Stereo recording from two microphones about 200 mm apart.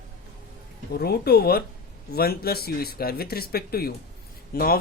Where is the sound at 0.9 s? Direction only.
50° left (ahead or behind).